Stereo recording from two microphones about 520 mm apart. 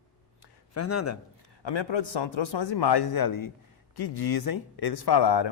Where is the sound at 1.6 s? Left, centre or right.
Left.